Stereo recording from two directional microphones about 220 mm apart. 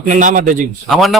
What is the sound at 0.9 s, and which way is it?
Speech, centre (ahead or behind).